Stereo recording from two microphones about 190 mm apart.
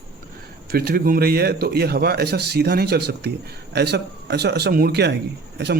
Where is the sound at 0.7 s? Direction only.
55° right (ahead or behind).